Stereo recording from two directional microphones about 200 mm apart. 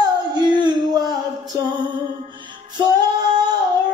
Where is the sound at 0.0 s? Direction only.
20° right (ahead or behind).